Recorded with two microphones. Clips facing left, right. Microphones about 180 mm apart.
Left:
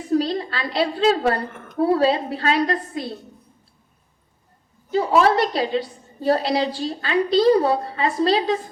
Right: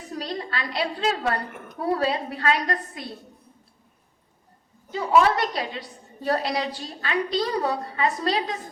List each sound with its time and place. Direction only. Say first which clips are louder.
0.1 s a woman's voice: left 10 dB; 30° left (ahead or behind)
4.9 s a woman's voice: left 3 dB; 30° left (ahead or behind)